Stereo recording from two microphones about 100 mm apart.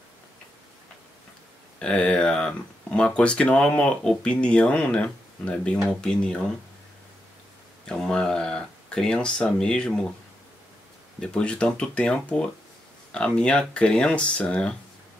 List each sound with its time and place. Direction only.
1.8 s speech: 10° left (ahead or behind)
7.8 s speech: 10° left (ahead or behind)
11.1 s speech: 10° left (ahead or behind)